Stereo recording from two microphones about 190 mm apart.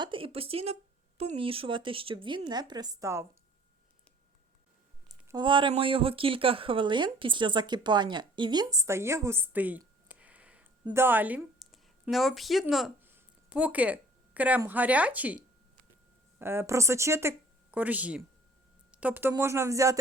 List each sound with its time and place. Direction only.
0.0 s speech: 25° right (ahead or behind)
5.3 s a woman's voice: 25° right (ahead or behind); by 15.4 s 10° right (ahead or behind)
16.4 s speech: 10° right (ahead or behind)
18.9 s a sound: 10° right (ahead or behind)
19.3 s speech: 15° right (ahead or behind)